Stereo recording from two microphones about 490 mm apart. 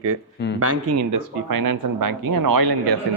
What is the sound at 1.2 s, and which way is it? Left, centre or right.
A man's voice, right.